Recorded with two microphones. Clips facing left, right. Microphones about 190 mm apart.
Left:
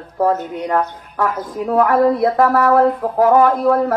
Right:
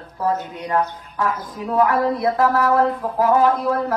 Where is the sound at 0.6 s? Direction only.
55° left (ahead or behind).